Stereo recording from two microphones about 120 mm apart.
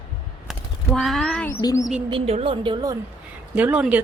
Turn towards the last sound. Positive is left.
turn(degrees=-10)  # may be behind; listen again after turning